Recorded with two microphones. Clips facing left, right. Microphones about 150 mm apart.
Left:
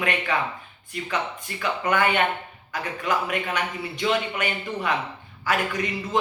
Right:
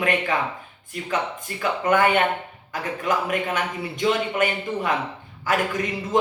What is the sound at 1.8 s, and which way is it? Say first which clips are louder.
A man's voice: right 3 dB; 45° right (ahead or behind).